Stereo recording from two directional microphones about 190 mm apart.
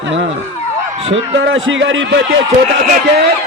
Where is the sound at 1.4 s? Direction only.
75° right (ahead or behind).